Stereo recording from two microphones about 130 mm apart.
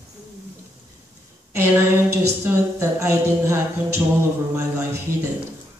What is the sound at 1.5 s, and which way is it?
A woman's voice, 15° right (ahead or behind).